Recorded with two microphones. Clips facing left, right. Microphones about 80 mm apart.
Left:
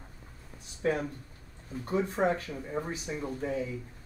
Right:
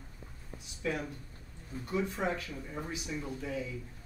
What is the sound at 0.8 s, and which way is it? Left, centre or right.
Speech, left.